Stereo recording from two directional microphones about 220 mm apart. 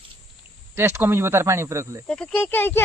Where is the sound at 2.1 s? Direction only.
5° left (ahead or behind).